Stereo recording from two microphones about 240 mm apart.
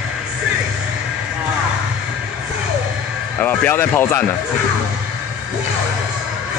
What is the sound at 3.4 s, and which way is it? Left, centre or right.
Speech, centre.